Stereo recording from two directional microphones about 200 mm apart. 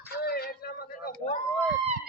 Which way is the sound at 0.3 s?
50° left (ahead or behind).